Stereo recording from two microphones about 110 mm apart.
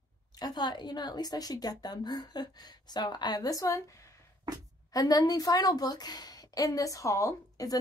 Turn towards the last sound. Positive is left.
turn(degrees=30)  # may be behind; listen again after turning